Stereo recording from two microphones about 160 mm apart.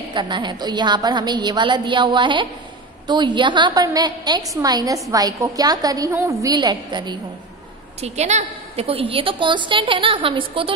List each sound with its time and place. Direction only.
0.1 s a woman's voice: 30° right (ahead or behind)
8.0 s a woman's voice: 45° right (ahead or behind)